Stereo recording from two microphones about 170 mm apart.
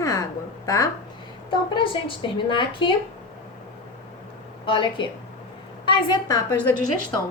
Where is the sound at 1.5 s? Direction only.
30° left (ahead or behind).